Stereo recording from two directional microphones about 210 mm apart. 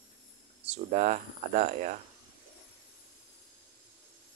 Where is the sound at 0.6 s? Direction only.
35° right (ahead or behind).